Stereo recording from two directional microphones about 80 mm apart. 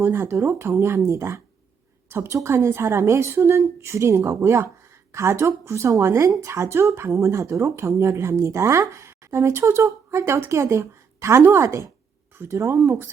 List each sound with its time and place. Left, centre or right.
0.0 s speech: right